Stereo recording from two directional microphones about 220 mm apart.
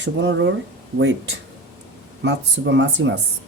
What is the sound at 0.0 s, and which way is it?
Speech, 55° right (ahead or behind).